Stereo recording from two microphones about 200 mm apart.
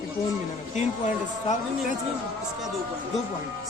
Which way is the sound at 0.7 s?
40° left (ahead or behind).